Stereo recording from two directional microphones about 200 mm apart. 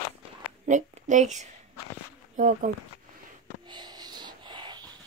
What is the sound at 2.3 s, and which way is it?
Speech, 40° right (ahead or behind).